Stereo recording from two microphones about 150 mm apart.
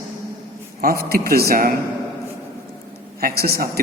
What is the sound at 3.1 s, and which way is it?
Speech, 90° right.